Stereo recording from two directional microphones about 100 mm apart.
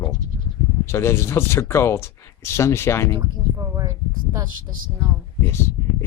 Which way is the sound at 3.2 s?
30° right (ahead or behind).